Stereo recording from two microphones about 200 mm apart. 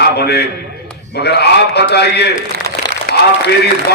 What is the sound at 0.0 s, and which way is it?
A man's voice, 55° left (ahead or behind).